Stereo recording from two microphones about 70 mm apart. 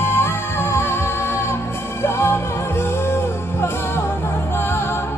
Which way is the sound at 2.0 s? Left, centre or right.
Left.